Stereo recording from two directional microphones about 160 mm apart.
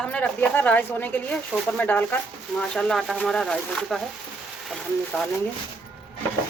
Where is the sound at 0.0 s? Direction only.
10° left (ahead or behind).